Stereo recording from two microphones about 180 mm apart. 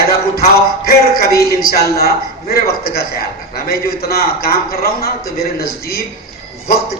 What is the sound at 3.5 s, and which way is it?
A man's voice, 60° left (ahead or behind).